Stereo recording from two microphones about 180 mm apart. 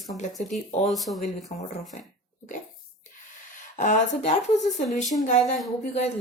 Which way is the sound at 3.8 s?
45° left (ahead or behind).